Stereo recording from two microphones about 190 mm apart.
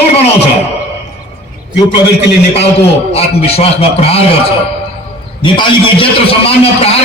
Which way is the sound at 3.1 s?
30° left (ahead or behind).